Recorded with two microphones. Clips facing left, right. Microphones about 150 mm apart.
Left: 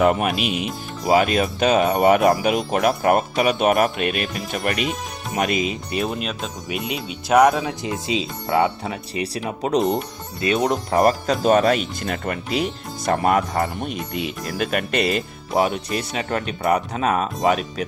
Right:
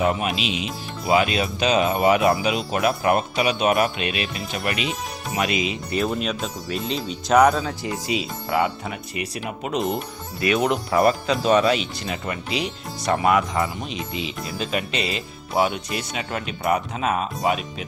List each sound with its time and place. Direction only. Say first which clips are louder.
0.0 s speech: left 4 dB; 55° left (ahead or behind)
5.9 s speech: right 3 dB; 20° left (ahead or behind)
6.1 s speech: right 2 dB; centre (ahead or behind)
6.7 s speech: even; 10° left (ahead or behind)
7.6 s speech: left 2 dB; 20° left (ahead or behind)
10.9 s speech: left 2 dB; 45° left (ahead or behind)
13.7 s speech: left 3 dB; 55° left (ahead or behind)